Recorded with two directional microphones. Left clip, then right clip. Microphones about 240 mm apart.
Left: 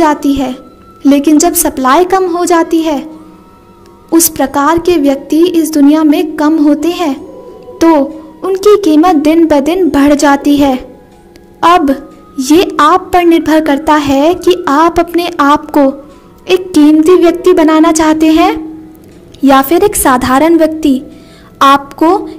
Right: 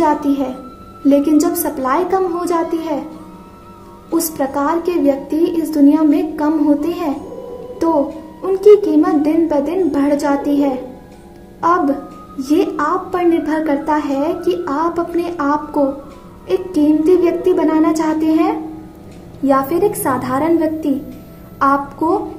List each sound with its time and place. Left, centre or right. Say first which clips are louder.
0.0 s a woman's voice: left 6 dB; left
4.1 s a woman's voice: left 8 dB; left
12.5 s a woman's voice: left 10 dB; left